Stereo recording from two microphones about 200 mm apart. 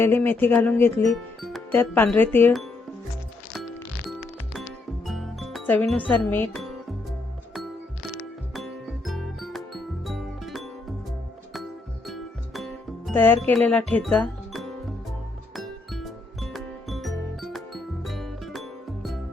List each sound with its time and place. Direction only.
0.0 s speech: 10° left (ahead or behind)
1.1 s speech: centre (ahead or behind)
5.0 s music: centre (ahead or behind)
8.5 s music: centre (ahead or behind)
12.0 s music: centre (ahead or behind)
13.5 s speech: 5° left (ahead or behind)
15.5 s music: centre (ahead or behind)